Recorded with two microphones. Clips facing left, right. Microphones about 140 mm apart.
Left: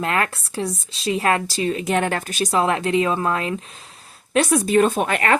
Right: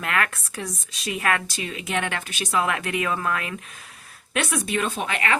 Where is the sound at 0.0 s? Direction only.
30° left (ahead or behind).